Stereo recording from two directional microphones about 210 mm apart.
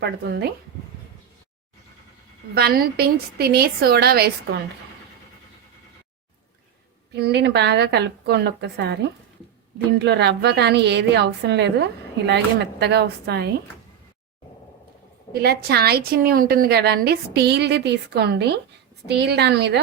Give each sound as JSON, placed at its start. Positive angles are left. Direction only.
{"t": 0.0, "sound": "a woman's voice", "side_deg": -50}
{"t": 2.6, "sound": "a woman's voice", "side_deg": -50}
{"t": 7.2, "sound": "a woman's voice", "side_deg": -55}
{"t": 15.3, "sound": "a woman's voice", "side_deg": -50}